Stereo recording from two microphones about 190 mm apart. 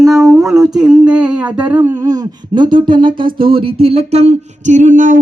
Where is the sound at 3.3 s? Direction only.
30° right (ahead or behind).